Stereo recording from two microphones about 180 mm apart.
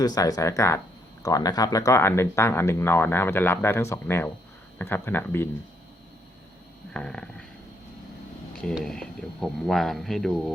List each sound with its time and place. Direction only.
0.0 s speech: 20° left (ahead or behind)
6.9 s speech: 5° left (ahead or behind)
8.7 s speech: centre (ahead or behind)